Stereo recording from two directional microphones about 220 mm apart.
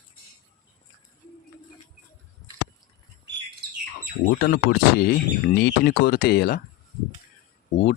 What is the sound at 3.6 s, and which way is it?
Bird, 45° right (ahead or behind).